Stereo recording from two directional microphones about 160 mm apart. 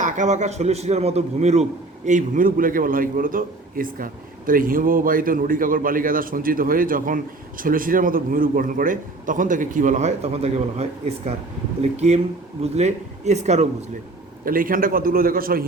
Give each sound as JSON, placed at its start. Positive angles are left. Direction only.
{"t": 0.0, "sound": "a man's voice", "side_deg": -50}
{"t": 14.4, "sound": "a man's voice", "side_deg": -60}